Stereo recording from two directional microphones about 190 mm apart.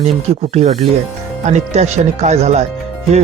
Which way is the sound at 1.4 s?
35° right (ahead or behind).